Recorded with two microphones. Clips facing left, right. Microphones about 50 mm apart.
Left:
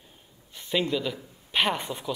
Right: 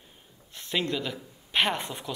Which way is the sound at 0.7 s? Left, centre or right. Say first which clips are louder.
Left 3 dB; centre.